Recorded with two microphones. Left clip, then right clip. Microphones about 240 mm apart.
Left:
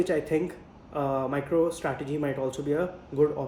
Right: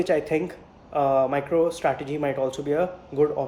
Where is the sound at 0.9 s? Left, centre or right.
Right.